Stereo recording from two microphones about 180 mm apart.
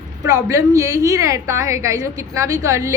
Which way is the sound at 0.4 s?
20° right (ahead or behind).